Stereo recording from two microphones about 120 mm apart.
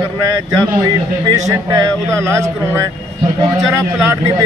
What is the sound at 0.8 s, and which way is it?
A man's voice, 35° right (ahead or behind).